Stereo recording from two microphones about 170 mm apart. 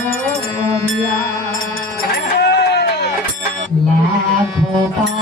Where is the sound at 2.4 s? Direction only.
75° left (ahead or behind).